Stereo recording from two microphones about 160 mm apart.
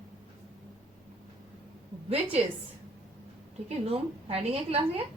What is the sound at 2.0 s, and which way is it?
Speech, 40° right (ahead or behind).